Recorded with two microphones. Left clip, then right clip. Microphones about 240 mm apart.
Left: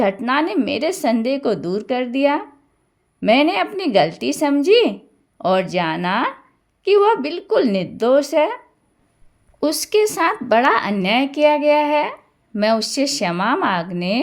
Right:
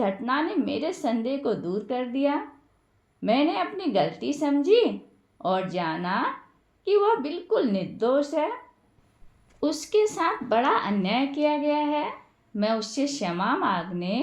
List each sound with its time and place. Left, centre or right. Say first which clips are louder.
0.0 s a woman's voice: left 8 dB; left
9.6 s a woman's voice: left 6 dB; left